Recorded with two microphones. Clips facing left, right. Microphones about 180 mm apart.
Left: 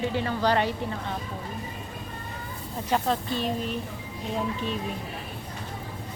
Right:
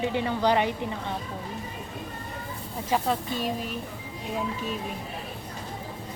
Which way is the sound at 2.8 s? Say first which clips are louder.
Even; 5° right (ahead or behind).